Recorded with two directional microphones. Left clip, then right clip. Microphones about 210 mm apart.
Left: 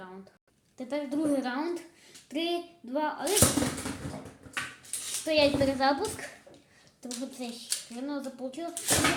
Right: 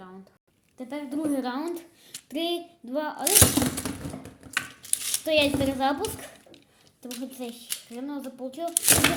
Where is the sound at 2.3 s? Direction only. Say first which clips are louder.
Right 2 dB; 45° right (ahead or behind).